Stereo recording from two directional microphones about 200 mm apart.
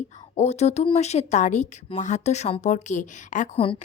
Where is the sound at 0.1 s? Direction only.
35° left (ahead or behind).